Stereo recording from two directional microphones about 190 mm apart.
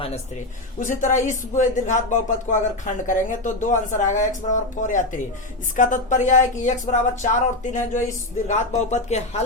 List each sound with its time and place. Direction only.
0.8 s speech: 45° left (ahead or behind)